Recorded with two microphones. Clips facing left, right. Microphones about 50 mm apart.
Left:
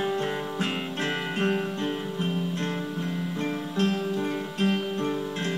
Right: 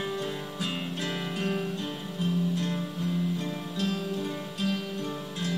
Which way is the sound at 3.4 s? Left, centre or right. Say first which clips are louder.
Left 5 dB; left.